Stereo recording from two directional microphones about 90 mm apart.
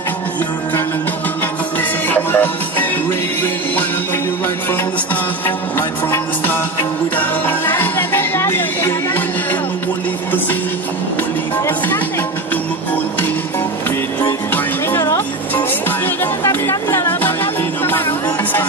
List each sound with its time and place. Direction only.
2.0 s music: 20° left (ahead or behind)
5.8 s music: 25° left (ahead or behind)
16.6 s music: 30° left (ahead or behind)